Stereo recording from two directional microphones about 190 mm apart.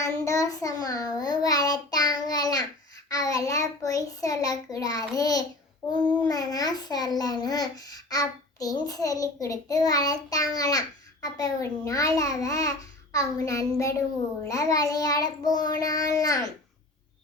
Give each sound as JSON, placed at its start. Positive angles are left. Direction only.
{"t": 0.0, "sound": "child singing", "side_deg": 15}
{"t": 3.1, "sound": "a child's voice", "side_deg": 20}